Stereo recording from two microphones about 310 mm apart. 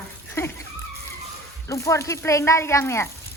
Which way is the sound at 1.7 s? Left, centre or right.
Centre.